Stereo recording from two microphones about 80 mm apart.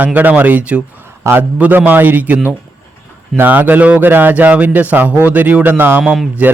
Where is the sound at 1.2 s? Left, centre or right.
Right.